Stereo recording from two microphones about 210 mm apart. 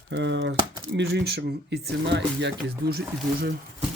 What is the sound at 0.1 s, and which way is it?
Speech, 60° right (ahead or behind).